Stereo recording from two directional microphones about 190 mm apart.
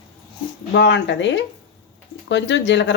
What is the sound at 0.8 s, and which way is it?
A woman's voice, 65° left (ahead or behind).